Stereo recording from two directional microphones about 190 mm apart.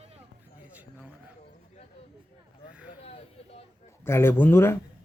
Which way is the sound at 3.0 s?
35° left (ahead or behind).